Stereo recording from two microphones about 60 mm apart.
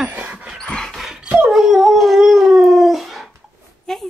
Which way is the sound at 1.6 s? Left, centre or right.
Centre.